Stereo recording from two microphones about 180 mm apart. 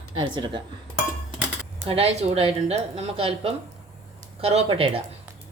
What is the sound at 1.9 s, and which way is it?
A woman's voice, 35° right (ahead or behind).